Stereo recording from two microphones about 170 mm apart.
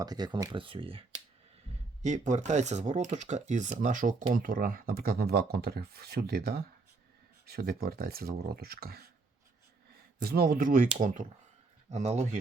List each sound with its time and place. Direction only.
0.0 s speech: 25° right (ahead or behind)
2.0 s speech: 45° right (ahead or behind); by 9.0 s 65° right (ahead or behind)
10.2 s speech: 65° right (ahead or behind); by 12.4 s 40° right (ahead or behind)